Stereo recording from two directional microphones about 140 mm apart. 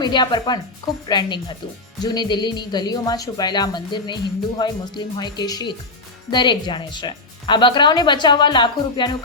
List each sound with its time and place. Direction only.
0.0 s speech: 35° left (ahead or behind)